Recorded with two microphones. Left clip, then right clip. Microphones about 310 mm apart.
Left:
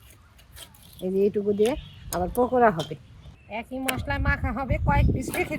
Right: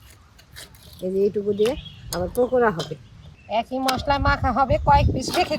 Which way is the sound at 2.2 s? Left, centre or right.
Centre.